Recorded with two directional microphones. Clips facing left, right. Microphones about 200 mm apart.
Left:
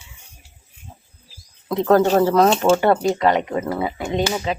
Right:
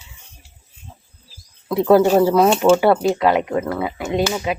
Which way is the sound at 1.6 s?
10° right (ahead or behind).